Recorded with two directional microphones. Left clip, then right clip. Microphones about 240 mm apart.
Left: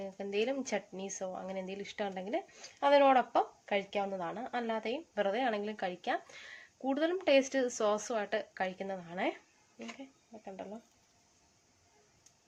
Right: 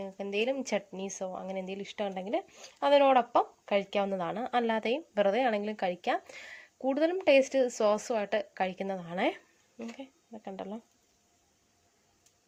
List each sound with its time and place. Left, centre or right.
0.0 s speech: centre; by 10.8 s right